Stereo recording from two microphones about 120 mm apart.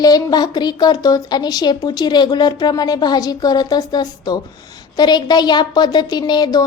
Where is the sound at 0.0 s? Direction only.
35° left (ahead or behind).